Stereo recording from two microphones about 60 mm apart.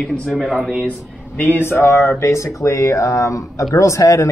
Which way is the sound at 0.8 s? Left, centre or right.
Left.